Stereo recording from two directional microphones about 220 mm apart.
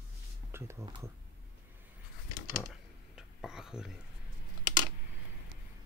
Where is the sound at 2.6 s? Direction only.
Centre (ahead or behind).